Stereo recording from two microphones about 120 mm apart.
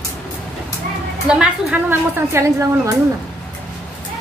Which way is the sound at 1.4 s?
10° right (ahead or behind).